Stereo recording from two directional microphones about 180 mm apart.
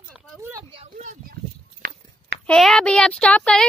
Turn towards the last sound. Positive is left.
turn(degrees=5)  # may be behind; listen again after turning